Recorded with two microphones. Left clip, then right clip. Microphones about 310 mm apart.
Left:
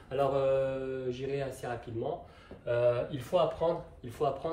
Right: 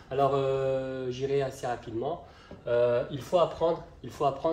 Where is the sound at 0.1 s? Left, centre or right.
Centre.